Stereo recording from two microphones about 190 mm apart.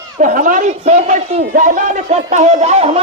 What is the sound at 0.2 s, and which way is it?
A man's voice, 45° right (ahead or behind).